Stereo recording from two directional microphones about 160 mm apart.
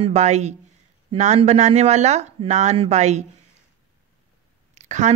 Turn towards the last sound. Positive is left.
turn(degrees=-45)  # may be behind; listen again after turning